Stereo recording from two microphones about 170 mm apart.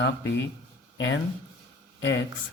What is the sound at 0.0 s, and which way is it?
Speech, 90° left.